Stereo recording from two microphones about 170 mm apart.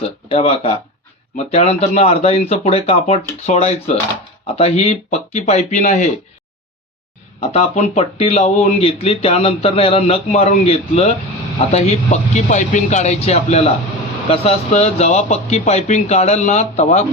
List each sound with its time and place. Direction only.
0.0 s speech: 35° left (ahead or behind)
7.5 s speech: 35° left (ahead or behind)